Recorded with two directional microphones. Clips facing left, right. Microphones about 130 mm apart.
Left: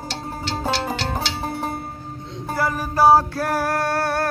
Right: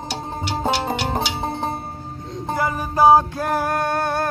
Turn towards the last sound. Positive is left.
turn(degrees=-20)  # may be behind; listen again after turning